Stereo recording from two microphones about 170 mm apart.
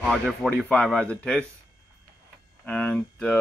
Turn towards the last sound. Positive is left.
turn(degrees=5)  # may be behind; listen again after turning